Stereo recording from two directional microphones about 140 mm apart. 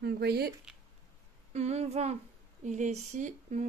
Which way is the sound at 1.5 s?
50° right (ahead or behind).